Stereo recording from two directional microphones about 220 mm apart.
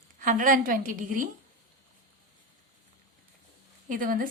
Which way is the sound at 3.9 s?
40° right (ahead or behind).